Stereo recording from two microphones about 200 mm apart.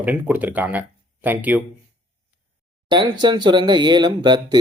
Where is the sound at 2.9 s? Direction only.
25° right (ahead or behind).